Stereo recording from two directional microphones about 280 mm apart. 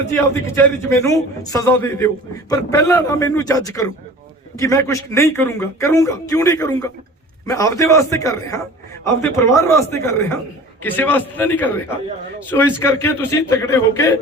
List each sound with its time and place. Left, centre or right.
0.4 s a man's voice: centre